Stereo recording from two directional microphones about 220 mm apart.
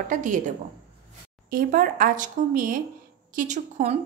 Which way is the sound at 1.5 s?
40° right (ahead or behind).